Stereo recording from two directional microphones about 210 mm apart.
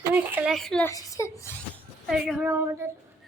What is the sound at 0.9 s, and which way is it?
Speech, 15° left (ahead or behind).